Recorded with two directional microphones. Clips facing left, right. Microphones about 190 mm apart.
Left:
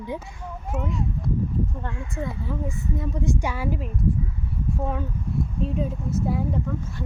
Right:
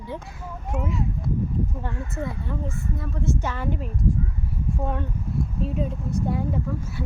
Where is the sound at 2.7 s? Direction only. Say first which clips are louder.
Left 2 dB; 15° left (ahead or behind).